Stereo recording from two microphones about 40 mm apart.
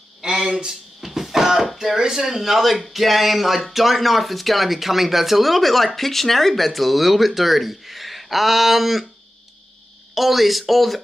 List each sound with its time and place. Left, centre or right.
0.2 s a sound: centre
1.0 s speech: centre
10.1 s speech: centre